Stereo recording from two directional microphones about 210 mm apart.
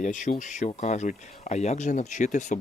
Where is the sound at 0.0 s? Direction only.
35° left (ahead or behind).